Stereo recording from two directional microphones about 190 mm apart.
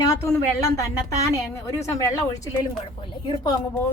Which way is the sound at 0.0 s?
15° left (ahead or behind).